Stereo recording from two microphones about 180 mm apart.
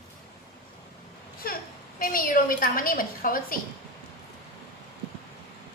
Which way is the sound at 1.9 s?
50° left (ahead or behind).